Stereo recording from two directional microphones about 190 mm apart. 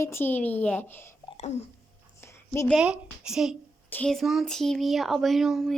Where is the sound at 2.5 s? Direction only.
10° left (ahead or behind).